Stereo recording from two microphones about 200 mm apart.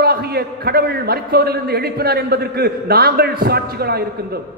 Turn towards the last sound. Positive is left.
turn(degrees=-50)  # may be behind; listen again after turning